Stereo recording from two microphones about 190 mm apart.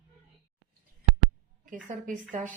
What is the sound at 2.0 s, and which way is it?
Speech, 45° right (ahead or behind).